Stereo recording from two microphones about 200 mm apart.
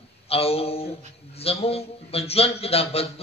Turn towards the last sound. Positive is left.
turn(degrees=30)  # may be behind; listen again after turning